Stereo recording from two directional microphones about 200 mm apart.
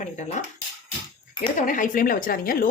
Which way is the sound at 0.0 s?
35° left (ahead or behind).